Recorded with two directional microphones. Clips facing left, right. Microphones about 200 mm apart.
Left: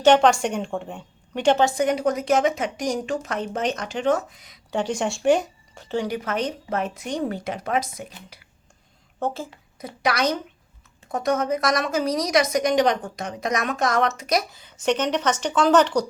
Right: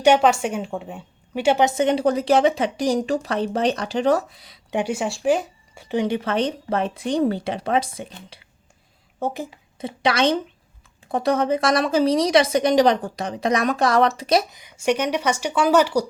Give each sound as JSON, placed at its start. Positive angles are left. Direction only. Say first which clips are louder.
{"t": 0.0, "sound": "a woman's voice", "louder": "even", "side_deg": -10}
{"t": 1.6, "sound": "a woman's voice", "louder": "right 2 dB", "side_deg": -25}
{"t": 4.7, "sound": "speech", "louder": "right 1 dB", "side_deg": -10}
{"t": 9.2, "sound": "speech", "louder": "right 1 dB", "side_deg": -15}
{"t": 9.7, "sound": "a woman's voice", "louder": "right 3 dB", "side_deg": -25}
{"t": 14.5, "sound": "speech", "louder": "right 1 dB", "side_deg": -15}